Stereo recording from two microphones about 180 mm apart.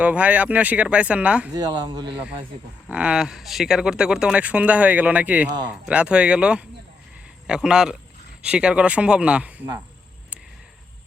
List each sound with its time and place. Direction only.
0.0 s speech: 10° right (ahead or behind)
1.5 s speech: 25° right (ahead or behind)
2.9 s speech: 5° right (ahead or behind)